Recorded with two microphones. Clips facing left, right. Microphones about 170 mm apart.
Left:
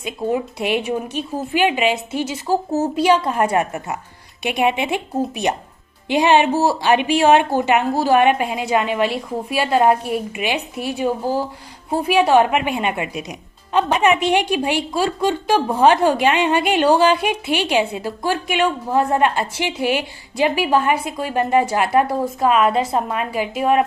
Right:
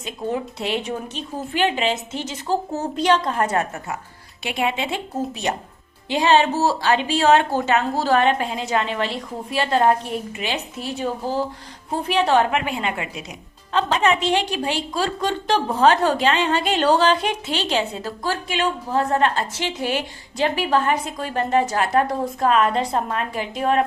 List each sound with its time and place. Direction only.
0.0 s a woman's voice: 10° left (ahead or behind)